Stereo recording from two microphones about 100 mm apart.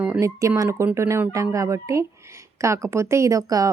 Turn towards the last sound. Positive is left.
turn(degrees=-35)  # may be behind; listen again after turning